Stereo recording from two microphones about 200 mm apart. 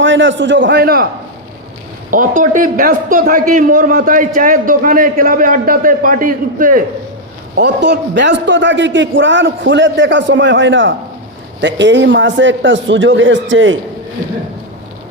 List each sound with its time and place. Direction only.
0.0 s a man's voice: 70° right (ahead or behind); by 1.0 s 50° right (ahead or behind)
2.0 s a man's voice: 40° right (ahead or behind)
7.5 s a man's voice: 60° right (ahead or behind)